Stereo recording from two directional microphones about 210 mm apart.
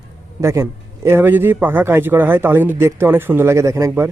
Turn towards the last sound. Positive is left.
turn(degrees=-15)  # may be behind; listen again after turning